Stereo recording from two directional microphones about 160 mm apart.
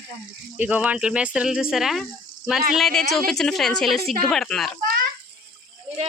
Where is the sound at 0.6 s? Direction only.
10° right (ahead or behind).